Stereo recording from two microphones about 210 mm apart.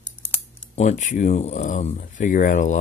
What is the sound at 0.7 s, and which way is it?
Speech, 35° left (ahead or behind).